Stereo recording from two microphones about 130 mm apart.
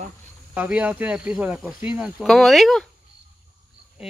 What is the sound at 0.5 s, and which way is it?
Speech, 10° right (ahead or behind).